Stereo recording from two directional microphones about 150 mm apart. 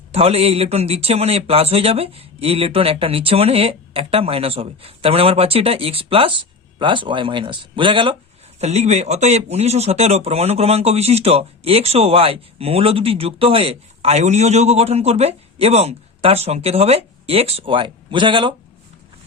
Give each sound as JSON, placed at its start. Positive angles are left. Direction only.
{"t": 0.1, "sound": "a man's voice", "side_deg": -40}
{"t": 8.6, "sound": "speech", "side_deg": -45}